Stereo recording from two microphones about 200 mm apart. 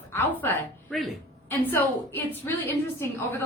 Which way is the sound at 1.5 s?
10° left (ahead or behind).